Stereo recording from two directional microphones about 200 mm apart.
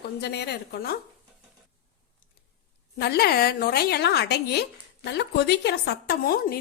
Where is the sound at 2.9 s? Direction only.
55° left (ahead or behind).